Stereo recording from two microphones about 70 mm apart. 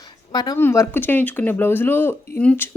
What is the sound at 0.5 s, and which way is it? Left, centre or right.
Speech, left.